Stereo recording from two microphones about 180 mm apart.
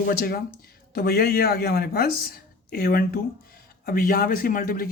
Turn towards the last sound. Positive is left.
turn(degrees=50)  # may be behind; listen again after turning